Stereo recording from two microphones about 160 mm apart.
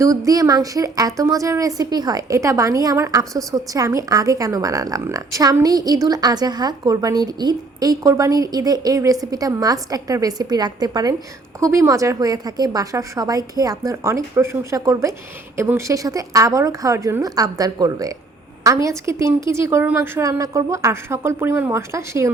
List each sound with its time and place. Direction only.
0.0 s a woman's voice: 20° right (ahead or behind)